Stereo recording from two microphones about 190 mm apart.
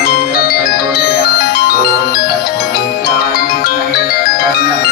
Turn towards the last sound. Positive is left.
turn(degrees=55)  # may be behind; listen again after turning